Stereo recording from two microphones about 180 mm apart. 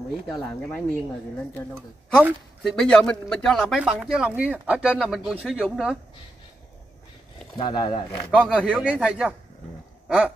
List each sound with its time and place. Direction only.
0.3 s speech: 5° left (ahead or behind)
2.1 s a woman's voice: 5° right (ahead or behind)
2.7 s speech: 5° left (ahead or behind)
7.5 s speech: 25° left (ahead or behind)
8.6 s speech: 5° right (ahead or behind)